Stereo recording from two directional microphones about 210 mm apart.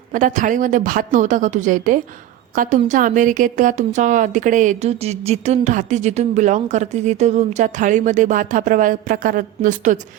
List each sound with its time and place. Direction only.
0.1 s a woman's voice: 40° right (ahead or behind)